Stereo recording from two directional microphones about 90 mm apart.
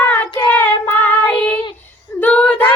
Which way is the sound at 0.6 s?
20° left (ahead or behind).